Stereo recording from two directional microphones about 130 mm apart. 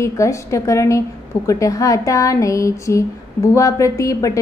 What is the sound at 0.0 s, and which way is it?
A woman's voice, 25° left (ahead or behind).